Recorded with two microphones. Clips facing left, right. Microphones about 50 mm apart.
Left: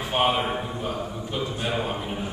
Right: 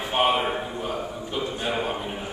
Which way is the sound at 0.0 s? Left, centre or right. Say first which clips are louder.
Right 1 dB; centre.